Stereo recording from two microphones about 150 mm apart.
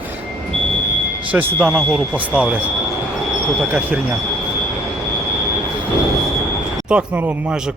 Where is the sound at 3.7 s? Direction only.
10° right (ahead or behind).